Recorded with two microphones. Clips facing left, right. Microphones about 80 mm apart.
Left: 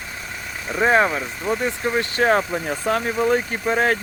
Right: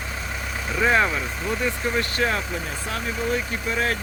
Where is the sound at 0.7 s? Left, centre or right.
Left.